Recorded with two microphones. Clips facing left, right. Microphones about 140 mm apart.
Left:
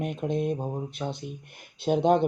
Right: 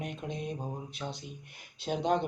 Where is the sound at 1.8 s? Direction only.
50° left (ahead or behind).